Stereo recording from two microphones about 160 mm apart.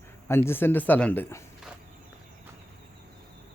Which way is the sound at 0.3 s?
15° left (ahead or behind).